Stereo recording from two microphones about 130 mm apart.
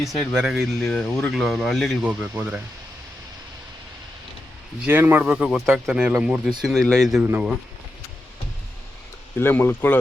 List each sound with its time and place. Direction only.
0.2 s speech: centre (ahead or behind)
2.3 s speech: 15° right (ahead or behind)
4.9 s speech: 15° right (ahead or behind); by 7.2 s 5° left (ahead or behind)
7.2 s speech: 10° right (ahead or behind)
9.4 s speech: 15° left (ahead or behind)